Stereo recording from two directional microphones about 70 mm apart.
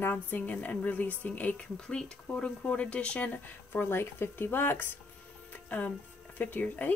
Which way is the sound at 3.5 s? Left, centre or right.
Left.